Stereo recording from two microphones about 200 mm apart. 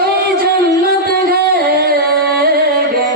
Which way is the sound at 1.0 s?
50° right (ahead or behind).